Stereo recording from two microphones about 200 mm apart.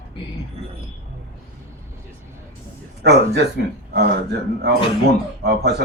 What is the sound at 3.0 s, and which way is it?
A man's voice, 55° right (ahead or behind).